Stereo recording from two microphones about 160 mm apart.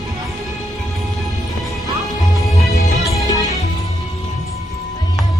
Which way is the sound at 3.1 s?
20° left (ahead or behind).